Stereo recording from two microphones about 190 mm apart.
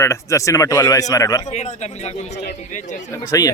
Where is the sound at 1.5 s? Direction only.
35° left (ahead or behind).